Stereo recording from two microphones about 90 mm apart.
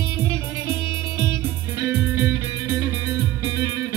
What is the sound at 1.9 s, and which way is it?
Music, 20° right (ahead or behind).